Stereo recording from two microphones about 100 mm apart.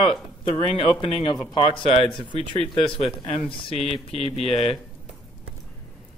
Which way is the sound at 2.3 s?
90° left.